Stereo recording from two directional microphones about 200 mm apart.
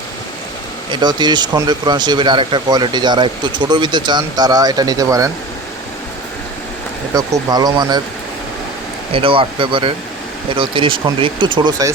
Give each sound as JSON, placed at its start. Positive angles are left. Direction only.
{"t": 0.9, "sound": "speech", "side_deg": -20}
{"t": 7.1, "sound": "speech", "side_deg": -20}
{"t": 9.1, "sound": "speech", "side_deg": -25}